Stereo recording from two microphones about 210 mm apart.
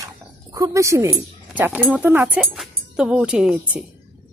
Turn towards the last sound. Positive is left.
turn(degrees=-5)  # may be behind; listen again after turning